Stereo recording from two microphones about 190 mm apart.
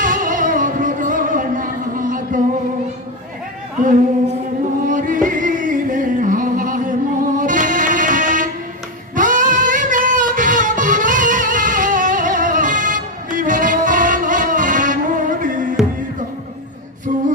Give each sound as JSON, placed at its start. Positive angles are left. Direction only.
{"t": 0.0, "sound": "music", "side_deg": -45}
{"t": 4.8, "sound": "music", "side_deg": -45}